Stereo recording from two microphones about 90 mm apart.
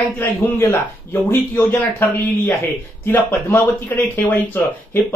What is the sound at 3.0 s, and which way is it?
Speech, 25° left (ahead or behind).